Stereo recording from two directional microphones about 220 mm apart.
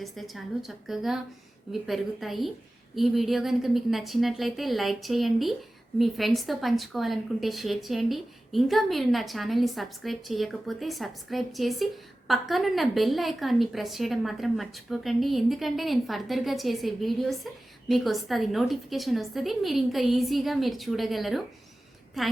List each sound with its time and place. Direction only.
0.0 s a woman's voice: centre (ahead or behind)